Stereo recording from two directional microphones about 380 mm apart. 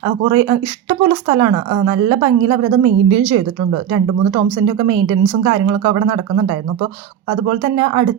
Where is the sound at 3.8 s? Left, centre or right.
Centre.